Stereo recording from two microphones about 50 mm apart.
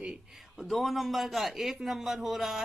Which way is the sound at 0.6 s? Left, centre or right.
Centre.